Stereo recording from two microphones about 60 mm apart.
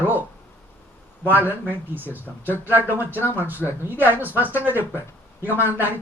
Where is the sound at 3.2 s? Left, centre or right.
Left.